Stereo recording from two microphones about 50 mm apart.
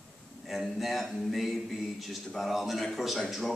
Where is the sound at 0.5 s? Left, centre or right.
Centre.